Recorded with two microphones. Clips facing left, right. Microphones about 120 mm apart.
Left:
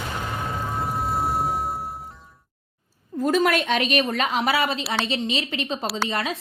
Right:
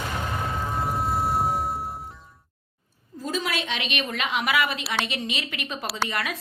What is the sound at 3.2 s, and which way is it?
A woman's voice, 55° left (ahead or behind).